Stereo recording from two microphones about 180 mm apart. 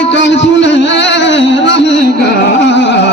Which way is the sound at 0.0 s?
85° left.